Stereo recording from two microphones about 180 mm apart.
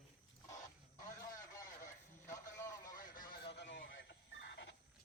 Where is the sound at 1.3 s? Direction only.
20° left (ahead or behind).